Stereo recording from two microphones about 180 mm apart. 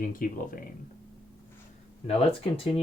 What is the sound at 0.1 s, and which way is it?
Speech, 50° left (ahead or behind).